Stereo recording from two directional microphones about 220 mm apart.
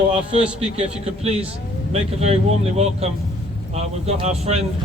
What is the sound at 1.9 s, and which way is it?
Speech, 30° right (ahead or behind).